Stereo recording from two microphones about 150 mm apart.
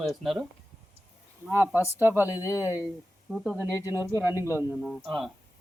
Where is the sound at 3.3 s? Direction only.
Centre (ahead or behind).